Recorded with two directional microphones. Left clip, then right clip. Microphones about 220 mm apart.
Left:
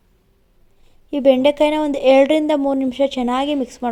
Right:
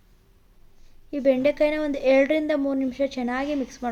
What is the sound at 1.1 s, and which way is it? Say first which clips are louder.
Speech: left 7 dB; 30° left (ahead or behind).